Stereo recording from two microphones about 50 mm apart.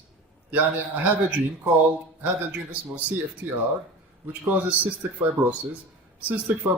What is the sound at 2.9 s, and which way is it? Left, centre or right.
A man's voice, right.